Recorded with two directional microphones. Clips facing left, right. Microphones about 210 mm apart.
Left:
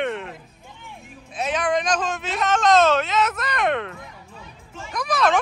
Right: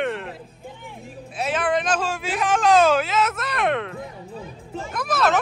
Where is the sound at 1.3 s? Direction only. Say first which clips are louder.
Even; 5° right (ahead or behind).